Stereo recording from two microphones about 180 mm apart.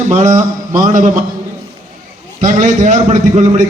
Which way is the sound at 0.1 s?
40° right (ahead or behind).